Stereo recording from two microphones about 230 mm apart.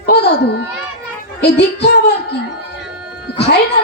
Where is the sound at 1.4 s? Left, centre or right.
Left.